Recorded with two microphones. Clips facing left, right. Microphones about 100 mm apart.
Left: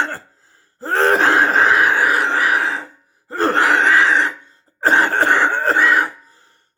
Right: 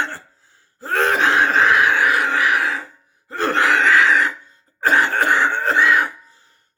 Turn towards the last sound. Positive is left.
turn(degrees=40)  # may be behind; listen again after turning